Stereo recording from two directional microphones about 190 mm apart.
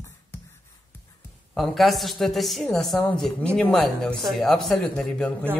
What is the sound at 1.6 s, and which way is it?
A woman's voice, centre (ahead or behind).